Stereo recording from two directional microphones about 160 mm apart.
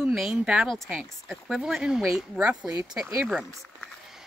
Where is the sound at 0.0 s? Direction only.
Centre (ahead or behind).